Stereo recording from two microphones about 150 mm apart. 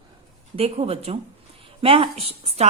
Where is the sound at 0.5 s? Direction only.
40° right (ahead or behind).